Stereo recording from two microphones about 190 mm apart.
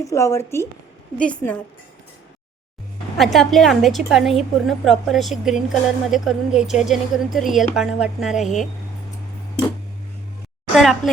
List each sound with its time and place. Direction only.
0.0 s a woman's voice: 15° left (ahead or behind)
3.2 s a woman's voice: centre (ahead or behind)
10.8 s a sound: centre (ahead or behind)